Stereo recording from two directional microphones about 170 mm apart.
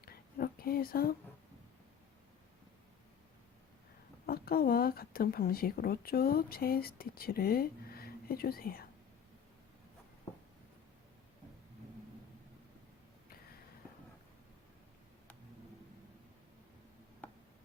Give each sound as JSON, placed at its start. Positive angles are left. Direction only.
{"t": 0.0, "sound": "whispering", "side_deg": 60}
{"t": 4.3, "sound": "speech", "side_deg": 60}
{"t": 17.2, "sound": "tick", "side_deg": 10}